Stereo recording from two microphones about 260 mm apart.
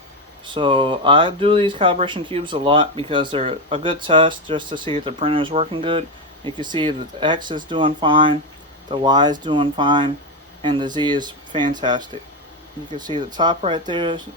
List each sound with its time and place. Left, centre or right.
0.4 s speech: centre